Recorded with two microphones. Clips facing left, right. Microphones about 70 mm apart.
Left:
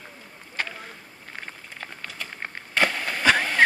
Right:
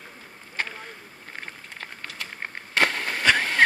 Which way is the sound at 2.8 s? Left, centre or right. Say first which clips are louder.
Even; right.